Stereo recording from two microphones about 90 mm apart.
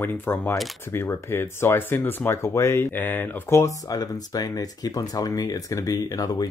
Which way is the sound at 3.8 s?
45° left (ahead or behind).